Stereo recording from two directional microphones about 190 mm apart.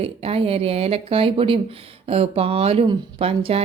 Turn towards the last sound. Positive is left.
turn(degrees=-30)  # may be behind; listen again after turning